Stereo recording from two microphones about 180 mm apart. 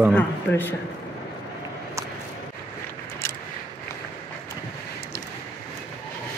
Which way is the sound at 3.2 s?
10° left (ahead or behind).